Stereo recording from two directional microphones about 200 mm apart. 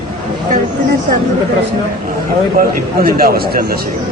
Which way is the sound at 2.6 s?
45° right (ahead or behind).